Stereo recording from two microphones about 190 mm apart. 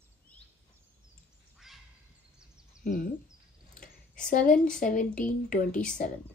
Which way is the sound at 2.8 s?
45° left (ahead or behind).